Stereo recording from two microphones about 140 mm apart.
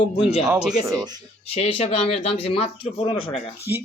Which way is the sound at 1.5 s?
45° left (ahead or behind).